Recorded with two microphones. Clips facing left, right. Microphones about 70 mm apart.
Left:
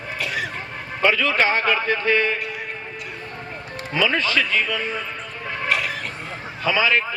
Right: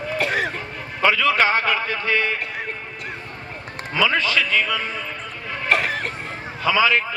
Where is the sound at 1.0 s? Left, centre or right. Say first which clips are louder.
Right 1 dB; left.